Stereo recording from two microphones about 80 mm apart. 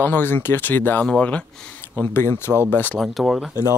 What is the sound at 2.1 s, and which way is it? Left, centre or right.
Speech, left.